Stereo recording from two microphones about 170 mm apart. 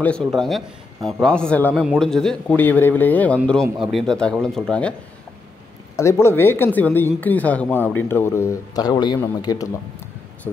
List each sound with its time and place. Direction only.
0.0 s a man's voice: 5° left (ahead or behind)
5.9 s a man's voice: 15° left (ahead or behind)